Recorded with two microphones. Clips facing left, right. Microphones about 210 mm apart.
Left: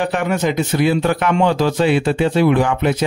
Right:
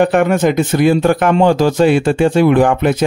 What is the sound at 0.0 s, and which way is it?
Speech, 50° right (ahead or behind).